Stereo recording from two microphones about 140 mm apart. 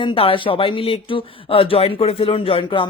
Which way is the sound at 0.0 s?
40° left (ahead or behind).